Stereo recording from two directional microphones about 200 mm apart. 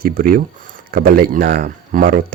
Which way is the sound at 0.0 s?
45° right (ahead or behind).